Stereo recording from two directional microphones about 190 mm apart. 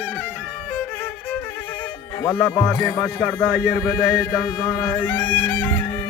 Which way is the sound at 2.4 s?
Centre (ahead or behind).